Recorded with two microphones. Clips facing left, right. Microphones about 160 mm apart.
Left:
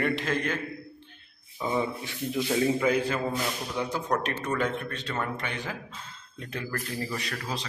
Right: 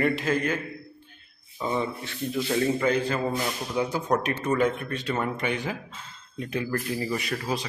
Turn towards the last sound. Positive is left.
turn(degrees=-10)  # may be behind; listen again after turning